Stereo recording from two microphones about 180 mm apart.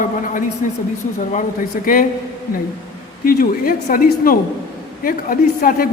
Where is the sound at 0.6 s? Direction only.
45° left (ahead or behind).